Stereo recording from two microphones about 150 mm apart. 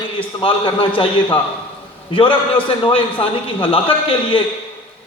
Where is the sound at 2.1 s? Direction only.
35° left (ahead or behind).